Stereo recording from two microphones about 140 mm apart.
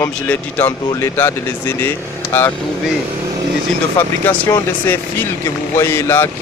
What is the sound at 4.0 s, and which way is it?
Speech, 15° left (ahead or behind).